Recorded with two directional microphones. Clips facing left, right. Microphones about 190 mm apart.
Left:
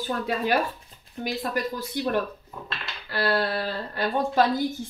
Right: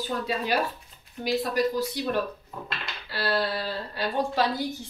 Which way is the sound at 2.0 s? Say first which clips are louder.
Left 2 dB; 55° left (ahead or behind).